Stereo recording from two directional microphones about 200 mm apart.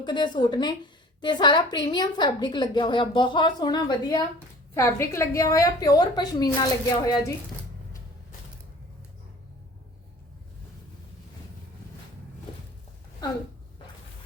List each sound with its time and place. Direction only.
0.0 s a woman's voice: 20° left (ahead or behind)